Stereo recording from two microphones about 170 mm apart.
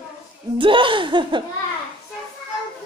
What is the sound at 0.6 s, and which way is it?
Speech, 30° right (ahead or behind).